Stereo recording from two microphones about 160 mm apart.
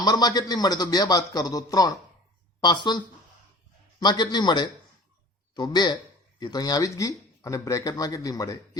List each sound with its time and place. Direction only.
0.0 s speech: 25° left (ahead or behind)
4.0 s speech: 30° left (ahead or behind)